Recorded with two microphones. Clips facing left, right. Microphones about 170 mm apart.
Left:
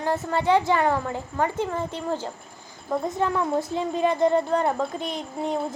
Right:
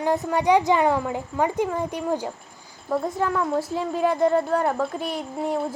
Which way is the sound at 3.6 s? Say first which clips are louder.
Even; 5° right (ahead or behind).